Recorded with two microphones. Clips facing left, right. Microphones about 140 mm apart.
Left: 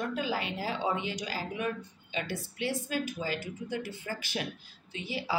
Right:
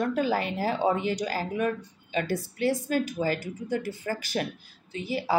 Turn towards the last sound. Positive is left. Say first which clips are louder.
# right 6 dB
turn(degrees=-45)  # may be behind; listen again after turning